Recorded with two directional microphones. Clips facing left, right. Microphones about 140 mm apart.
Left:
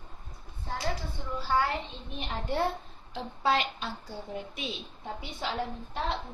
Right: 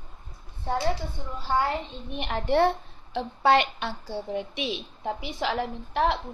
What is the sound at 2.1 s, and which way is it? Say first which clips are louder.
A woman's voice: right 8 dB; 75° right (ahead or behind).